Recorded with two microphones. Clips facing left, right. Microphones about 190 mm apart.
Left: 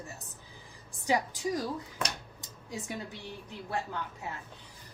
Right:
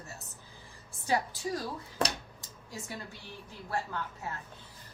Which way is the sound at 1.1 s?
15° left (ahead or behind).